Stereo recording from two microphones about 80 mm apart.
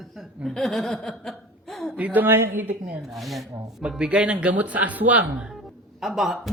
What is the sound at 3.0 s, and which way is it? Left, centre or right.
Speech, centre.